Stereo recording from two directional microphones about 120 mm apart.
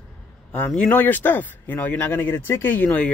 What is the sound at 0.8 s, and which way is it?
Speech, 15° left (ahead or behind).